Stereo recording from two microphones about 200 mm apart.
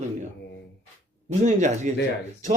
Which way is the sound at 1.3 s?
35° right (ahead or behind).